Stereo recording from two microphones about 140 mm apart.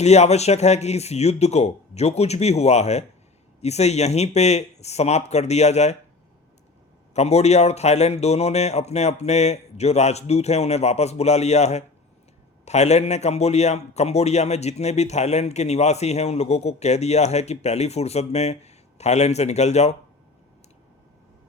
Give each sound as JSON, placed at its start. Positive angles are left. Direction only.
{"t": 0.0, "sound": "a man's voice", "side_deg": 50}
{"t": 7.1, "sound": "a man's voice", "side_deg": 50}